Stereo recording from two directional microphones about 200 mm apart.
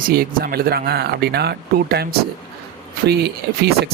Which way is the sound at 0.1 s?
50° right (ahead or behind).